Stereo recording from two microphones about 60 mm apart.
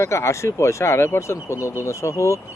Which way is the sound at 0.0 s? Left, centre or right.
Left.